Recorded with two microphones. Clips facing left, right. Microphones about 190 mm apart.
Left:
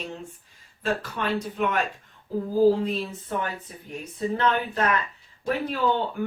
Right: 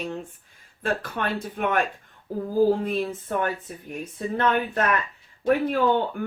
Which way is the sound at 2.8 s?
50° right (ahead or behind).